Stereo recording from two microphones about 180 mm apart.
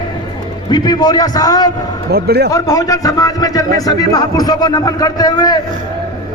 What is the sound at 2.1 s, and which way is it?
Speech, 65° right (ahead or behind).